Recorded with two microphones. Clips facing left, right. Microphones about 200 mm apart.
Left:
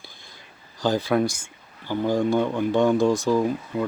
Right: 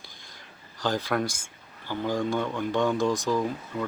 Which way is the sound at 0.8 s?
15° left (ahead or behind).